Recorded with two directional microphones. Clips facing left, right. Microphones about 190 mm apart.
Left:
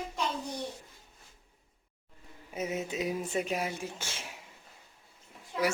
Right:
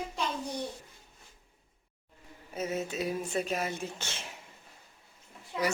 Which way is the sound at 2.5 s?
15° left (ahead or behind).